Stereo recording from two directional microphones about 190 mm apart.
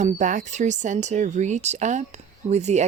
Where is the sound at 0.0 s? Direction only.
40° right (ahead or behind).